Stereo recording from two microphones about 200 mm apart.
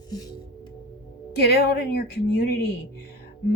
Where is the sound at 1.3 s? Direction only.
50° left (ahead or behind).